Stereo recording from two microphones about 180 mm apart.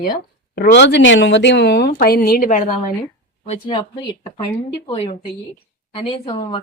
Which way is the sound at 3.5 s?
35° left (ahead or behind).